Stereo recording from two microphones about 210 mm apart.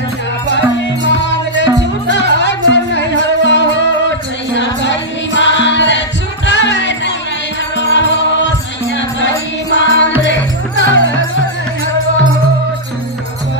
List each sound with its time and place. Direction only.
0.5 s music: 60° left (ahead or behind)